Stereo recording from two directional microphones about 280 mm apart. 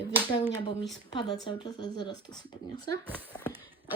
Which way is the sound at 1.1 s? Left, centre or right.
Centre.